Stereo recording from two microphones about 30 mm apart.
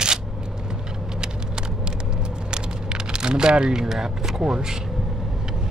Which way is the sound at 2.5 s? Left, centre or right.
Right.